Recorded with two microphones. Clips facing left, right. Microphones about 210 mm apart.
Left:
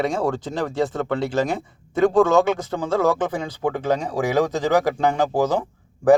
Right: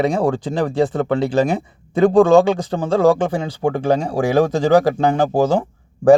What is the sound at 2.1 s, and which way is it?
Speech, 30° right (ahead or behind).